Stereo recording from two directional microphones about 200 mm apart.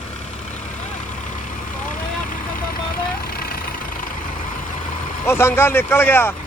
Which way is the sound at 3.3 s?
50° left (ahead or behind).